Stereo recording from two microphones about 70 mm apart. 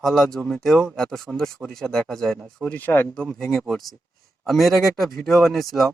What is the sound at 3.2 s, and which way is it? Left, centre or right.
Speech, centre.